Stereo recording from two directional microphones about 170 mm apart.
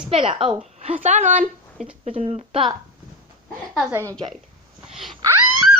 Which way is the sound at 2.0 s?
35° right (ahead or behind).